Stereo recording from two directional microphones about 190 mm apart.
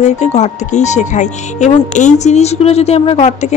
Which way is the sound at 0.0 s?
35° left (ahead or behind).